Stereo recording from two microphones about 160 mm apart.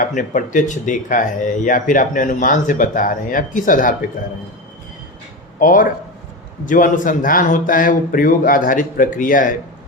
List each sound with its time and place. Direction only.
0.0 s speech: 55° left (ahead or behind)
5.5 s speech: 55° left (ahead or behind)